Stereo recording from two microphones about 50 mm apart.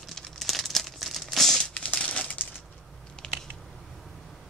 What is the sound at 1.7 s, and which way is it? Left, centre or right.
Crumpling, left.